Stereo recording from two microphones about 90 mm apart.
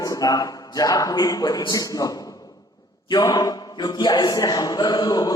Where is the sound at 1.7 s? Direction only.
40° left (ahead or behind).